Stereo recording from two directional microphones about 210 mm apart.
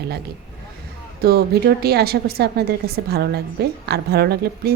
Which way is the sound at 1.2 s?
50° right (ahead or behind).